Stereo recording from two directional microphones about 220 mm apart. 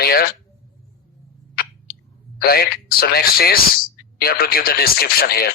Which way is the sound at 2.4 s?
45° left (ahead or behind).